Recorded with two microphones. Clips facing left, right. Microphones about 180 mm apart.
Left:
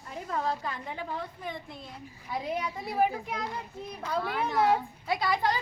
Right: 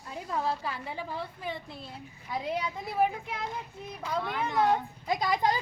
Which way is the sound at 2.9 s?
Centre (ahead or behind).